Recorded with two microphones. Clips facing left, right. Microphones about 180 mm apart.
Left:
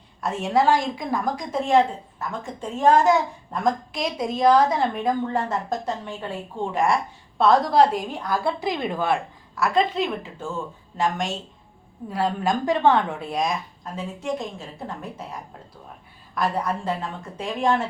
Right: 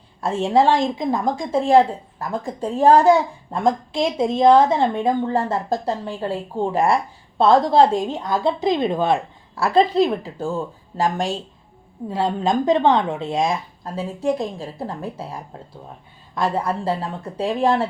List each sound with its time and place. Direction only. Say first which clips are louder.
0.2 s a woman's voice: right 4 dB; 30° right (ahead or behind)
12.1 s a woman's voice: right 3 dB; 25° right (ahead or behind)